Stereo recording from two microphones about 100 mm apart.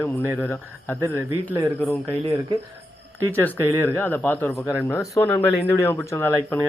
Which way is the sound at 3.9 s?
20° left (ahead or behind).